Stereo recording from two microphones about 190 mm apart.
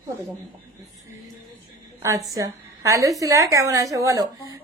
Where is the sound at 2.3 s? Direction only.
15° right (ahead or behind).